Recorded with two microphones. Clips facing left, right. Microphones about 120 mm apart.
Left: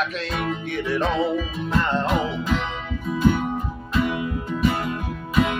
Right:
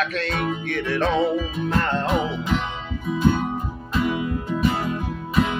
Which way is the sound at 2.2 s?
20° right (ahead or behind).